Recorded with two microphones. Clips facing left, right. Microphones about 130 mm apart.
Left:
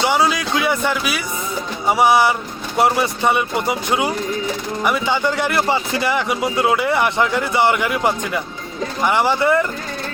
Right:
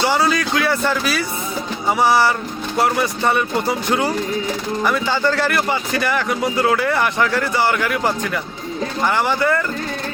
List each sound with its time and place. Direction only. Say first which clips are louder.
0.0 s a man's voice: even; 20° left (ahead or behind)